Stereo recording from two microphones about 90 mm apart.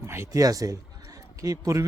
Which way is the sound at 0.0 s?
30° right (ahead or behind).